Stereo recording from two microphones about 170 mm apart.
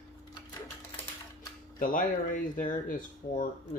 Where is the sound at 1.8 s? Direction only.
55° left (ahead or behind).